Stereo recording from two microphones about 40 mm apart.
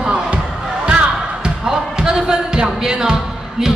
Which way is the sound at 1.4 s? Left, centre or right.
Centre.